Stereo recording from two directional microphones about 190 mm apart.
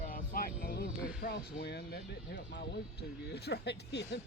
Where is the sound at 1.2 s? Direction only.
55° left (ahead or behind).